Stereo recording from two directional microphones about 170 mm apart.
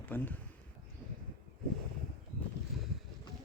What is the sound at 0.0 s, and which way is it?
Speech, 10° left (ahead or behind).